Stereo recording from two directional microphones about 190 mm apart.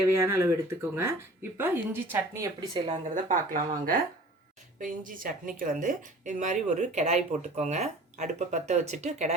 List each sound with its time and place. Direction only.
0.1 s speech: 15° right (ahead or behind)
2.8 s speech: 40° right (ahead or behind)